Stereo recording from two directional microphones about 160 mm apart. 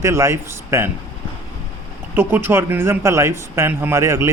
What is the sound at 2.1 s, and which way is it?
Speech, 15° right (ahead or behind).